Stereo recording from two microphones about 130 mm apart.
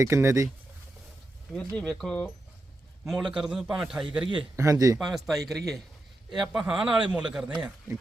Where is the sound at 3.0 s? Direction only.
5° right (ahead or behind).